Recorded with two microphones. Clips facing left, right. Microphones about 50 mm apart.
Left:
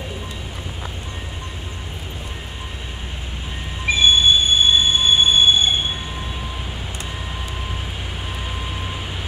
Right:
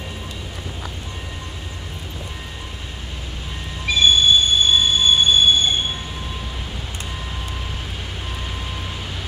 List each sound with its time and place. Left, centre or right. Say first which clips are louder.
3.8 s train: even; left